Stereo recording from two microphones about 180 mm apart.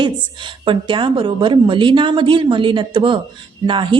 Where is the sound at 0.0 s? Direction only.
25° right (ahead or behind).